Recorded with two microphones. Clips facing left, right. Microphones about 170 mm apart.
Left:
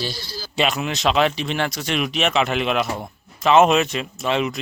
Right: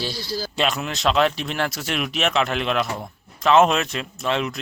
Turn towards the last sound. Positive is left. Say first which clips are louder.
# left 2 dB
turn(degrees=0)  # may be behind; listen again after turning